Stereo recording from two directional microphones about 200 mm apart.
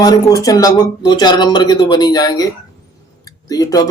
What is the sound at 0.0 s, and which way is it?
A man's voice, 15° left (ahead or behind).